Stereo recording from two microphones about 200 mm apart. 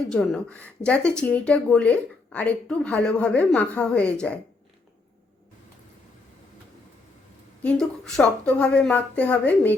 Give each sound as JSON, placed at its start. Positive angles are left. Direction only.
{"t": 0.1, "sound": "speech", "side_deg": 0}
{"t": 7.6, "sound": "speech", "side_deg": 5}